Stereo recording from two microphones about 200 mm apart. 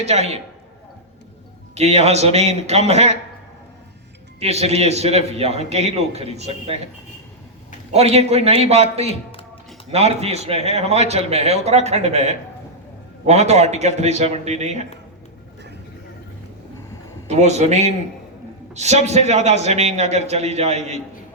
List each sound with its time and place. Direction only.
0.0 s a man's voice: 35° right (ahead or behind)
1.7 s a man's voice: 35° right (ahead or behind)
4.4 s a man's voice: 30° right (ahead or behind)
7.9 s a man's voice: 30° right (ahead or behind)
17.2 s a man's voice: 35° right (ahead or behind)